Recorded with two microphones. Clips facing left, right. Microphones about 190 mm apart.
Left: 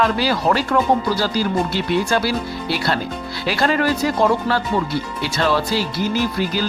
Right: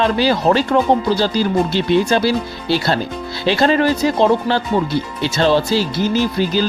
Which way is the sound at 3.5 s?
25° right (ahead or behind).